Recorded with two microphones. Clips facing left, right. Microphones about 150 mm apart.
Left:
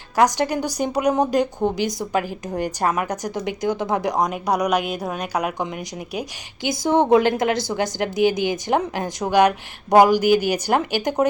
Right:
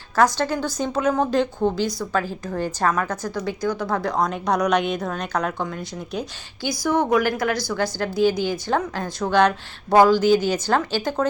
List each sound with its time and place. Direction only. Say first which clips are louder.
0.2 s a woman's voice: left 1 dB; 15° left (ahead or behind)